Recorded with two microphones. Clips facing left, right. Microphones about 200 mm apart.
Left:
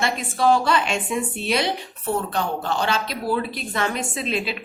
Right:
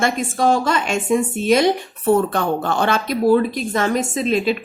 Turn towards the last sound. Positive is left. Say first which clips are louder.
# right 7 dB
turn(degrees=-45)  # may be behind; listen again after turning